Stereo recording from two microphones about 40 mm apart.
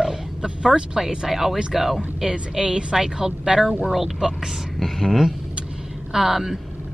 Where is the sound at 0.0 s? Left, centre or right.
Centre.